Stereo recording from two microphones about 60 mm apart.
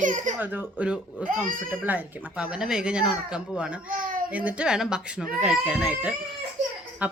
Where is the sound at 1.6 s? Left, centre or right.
Right.